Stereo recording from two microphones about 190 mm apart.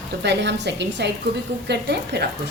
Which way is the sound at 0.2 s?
65° right (ahead or behind).